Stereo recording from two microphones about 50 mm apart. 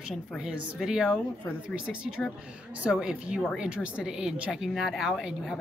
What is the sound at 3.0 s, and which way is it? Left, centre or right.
A woman's voice, centre.